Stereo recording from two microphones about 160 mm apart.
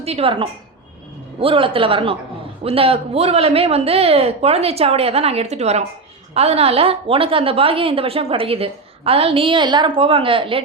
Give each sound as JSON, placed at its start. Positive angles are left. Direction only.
{"t": 0.0, "sound": "a woman's voice", "side_deg": -40}